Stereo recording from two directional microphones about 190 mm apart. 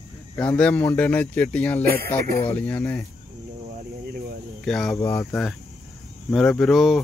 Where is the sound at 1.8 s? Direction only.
55° right (ahead or behind).